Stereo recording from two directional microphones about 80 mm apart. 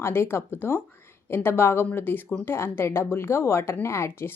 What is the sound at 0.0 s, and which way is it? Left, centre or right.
Speech, left.